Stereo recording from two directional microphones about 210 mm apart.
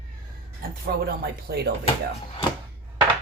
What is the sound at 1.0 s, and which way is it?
Speech, 50° right (ahead or behind).